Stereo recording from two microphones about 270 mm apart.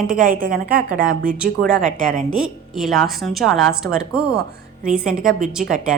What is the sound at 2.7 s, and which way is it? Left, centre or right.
A woman's voice, centre.